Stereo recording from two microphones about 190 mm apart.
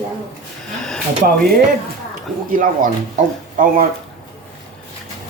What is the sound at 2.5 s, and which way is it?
Speech, 45° right (ahead or behind).